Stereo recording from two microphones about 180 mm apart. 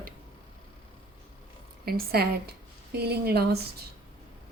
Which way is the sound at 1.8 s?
60° right (ahead or behind).